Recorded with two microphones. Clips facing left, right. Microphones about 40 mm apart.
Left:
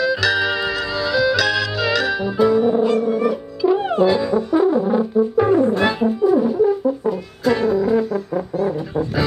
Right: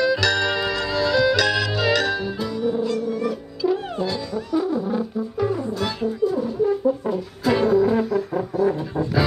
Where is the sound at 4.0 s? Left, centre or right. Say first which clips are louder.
Left 10 dB; left.